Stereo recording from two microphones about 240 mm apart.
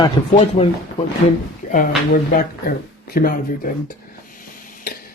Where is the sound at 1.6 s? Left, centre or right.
Left.